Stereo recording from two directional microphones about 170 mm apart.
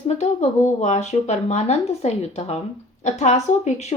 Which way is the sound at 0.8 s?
40° left (ahead or behind).